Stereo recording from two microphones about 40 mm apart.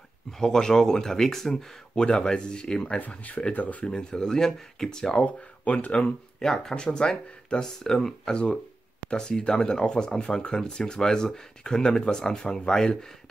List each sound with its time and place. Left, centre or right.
0.4 s speech: centre
3.0 s speech: left
3.8 s speech: left
4.1 s speech: centre
5.2 s speech: left
6.4 s speech: centre
6.7 s speech: left
8.3 s speech: left